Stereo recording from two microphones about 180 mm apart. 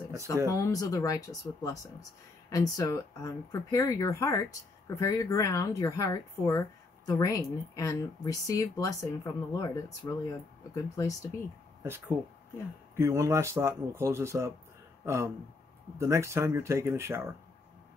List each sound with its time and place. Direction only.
0.5 s speech: 20° left (ahead or behind)
12.9 s speech: 15° right (ahead or behind)